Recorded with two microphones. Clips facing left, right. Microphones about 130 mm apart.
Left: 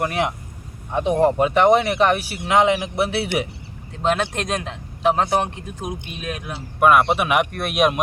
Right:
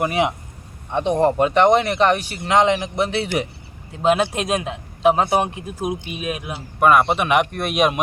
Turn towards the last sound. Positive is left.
turn(degrees=0)  # may be behind; listen again after turning